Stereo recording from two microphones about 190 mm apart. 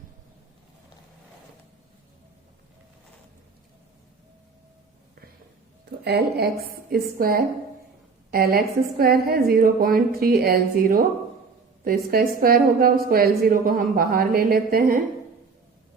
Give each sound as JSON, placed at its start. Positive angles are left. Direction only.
{"t": 6.1, "sound": "a woman's voice", "side_deg": -55}